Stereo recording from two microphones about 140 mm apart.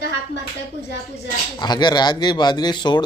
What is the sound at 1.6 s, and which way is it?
A man's voice, 30° left (ahead or behind).